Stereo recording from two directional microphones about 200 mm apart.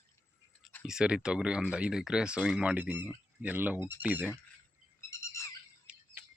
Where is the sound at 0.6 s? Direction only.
5° left (ahead or behind).